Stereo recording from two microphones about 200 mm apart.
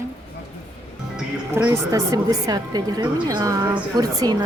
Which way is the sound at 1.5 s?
10° right (ahead or behind).